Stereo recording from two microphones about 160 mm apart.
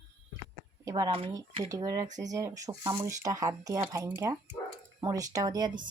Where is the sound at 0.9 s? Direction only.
20° right (ahead or behind).